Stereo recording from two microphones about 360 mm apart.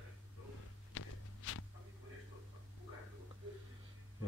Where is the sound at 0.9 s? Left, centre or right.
Left.